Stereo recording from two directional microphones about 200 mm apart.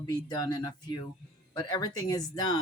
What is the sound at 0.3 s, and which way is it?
Speech, 20° left (ahead or behind).